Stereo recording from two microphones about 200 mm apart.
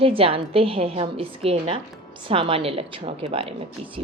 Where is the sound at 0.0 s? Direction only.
25° right (ahead or behind).